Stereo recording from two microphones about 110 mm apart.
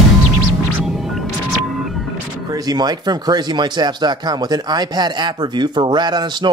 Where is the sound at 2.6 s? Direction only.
40° right (ahead or behind).